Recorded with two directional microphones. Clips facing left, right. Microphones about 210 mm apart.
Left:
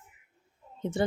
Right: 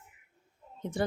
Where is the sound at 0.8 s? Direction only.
25° left (ahead or behind).